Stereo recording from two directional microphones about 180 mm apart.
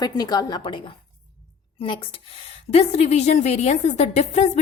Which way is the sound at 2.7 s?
35° left (ahead or behind).